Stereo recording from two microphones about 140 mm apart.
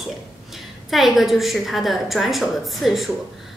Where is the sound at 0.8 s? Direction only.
Centre (ahead or behind).